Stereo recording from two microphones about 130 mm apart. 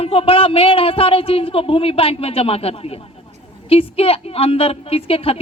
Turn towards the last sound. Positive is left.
turn(degrees=50)  # may be behind; listen again after turning